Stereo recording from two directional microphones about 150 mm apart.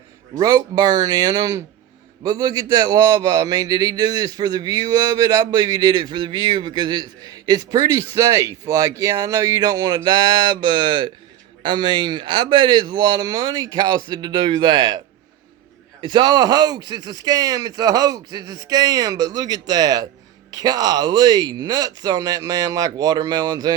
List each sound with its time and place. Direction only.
0.3 s speech: 25° right (ahead or behind)